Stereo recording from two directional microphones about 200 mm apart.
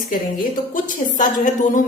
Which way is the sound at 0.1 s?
40° left (ahead or behind).